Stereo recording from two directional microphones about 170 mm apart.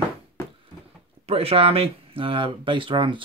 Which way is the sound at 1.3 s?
35° right (ahead or behind).